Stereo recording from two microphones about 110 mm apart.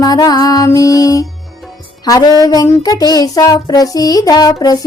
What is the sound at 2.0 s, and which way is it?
Music, 35° left (ahead or behind).